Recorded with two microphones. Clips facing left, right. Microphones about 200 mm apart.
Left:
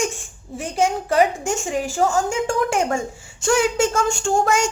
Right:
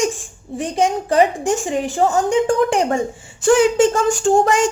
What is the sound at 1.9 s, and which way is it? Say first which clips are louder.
Speech: right 2 dB; 20° right (ahead or behind).